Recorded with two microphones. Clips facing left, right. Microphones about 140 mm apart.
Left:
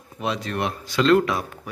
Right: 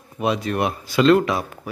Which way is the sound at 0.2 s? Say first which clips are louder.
Right 4 dB; 10° right (ahead or behind).